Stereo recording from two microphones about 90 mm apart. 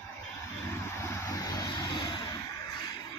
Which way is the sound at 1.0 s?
30° left (ahead or behind).